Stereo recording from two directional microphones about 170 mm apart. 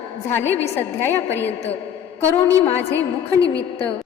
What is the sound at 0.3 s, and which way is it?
A woman's voice, 15° left (ahead or behind).